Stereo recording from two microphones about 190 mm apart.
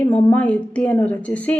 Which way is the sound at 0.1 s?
5° left (ahead or behind).